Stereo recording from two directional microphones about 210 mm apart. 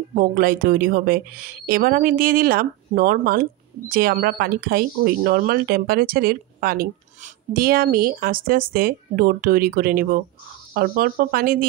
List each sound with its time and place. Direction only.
0.1 s speech: 40° right (ahead or behind)